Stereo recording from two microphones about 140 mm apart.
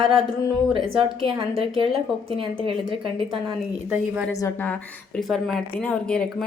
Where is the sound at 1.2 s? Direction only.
40° right (ahead or behind).